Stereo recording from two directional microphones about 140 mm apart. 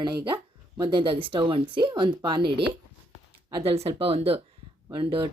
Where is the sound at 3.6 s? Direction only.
45° right (ahead or behind).